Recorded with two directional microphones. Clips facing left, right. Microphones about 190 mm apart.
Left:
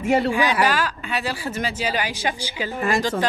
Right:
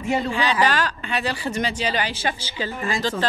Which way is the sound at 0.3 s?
10° left (ahead or behind).